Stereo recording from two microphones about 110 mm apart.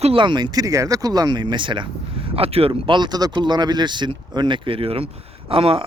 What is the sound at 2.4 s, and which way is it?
Speech, 60° right (ahead or behind).